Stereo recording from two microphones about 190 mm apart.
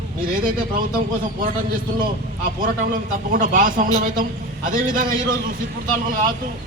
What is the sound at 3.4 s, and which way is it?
A man's voice, 45° right (ahead or behind).